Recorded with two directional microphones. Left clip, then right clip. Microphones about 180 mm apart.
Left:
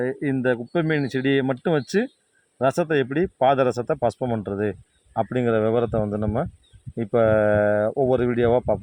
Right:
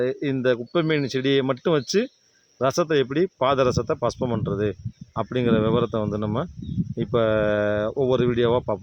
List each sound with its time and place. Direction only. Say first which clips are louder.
0.0 s speech: right 1 dB; 20° right (ahead or behind)